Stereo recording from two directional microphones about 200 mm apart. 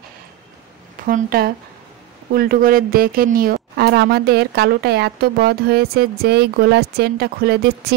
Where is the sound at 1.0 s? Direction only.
45° right (ahead or behind).